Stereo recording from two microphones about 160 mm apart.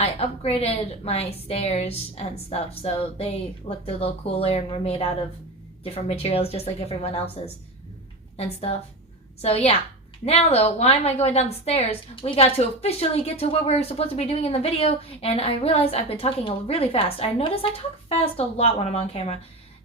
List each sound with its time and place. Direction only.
0.0 s a woman's voice: 40° left (ahead or behind)
9.4 s a woman's voice: 40° left (ahead or behind)